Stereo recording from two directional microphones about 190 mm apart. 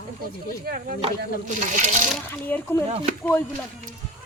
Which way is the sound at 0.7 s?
55° right (ahead or behind).